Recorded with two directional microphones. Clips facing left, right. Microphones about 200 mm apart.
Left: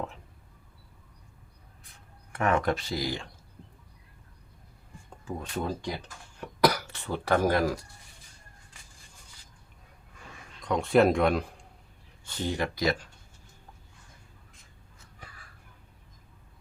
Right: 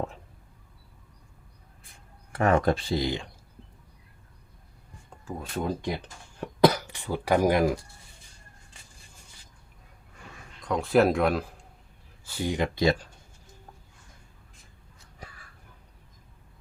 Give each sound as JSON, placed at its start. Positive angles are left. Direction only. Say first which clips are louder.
{"t": 2.3, "sound": "speech", "louder": "right 3 dB", "side_deg": -35}
{"t": 5.6, "sound": "speech", "louder": "right 6 dB", "side_deg": -20}
{"t": 6.4, "sound": "cough", "louder": "right 4 dB", "side_deg": -25}
{"t": 10.6, "sound": "speech", "louder": "even", "side_deg": 0}